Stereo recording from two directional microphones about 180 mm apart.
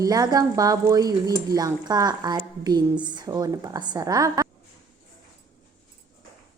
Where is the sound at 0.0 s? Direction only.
20° right (ahead or behind).